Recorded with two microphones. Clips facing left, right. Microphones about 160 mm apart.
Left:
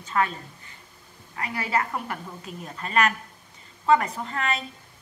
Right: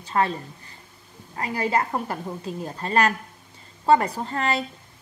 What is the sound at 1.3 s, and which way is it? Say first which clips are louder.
A woman's voice: right 3 dB; 30° right (ahead or behind).